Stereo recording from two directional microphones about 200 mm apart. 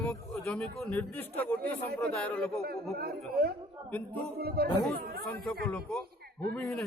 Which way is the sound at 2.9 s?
50° right (ahead or behind).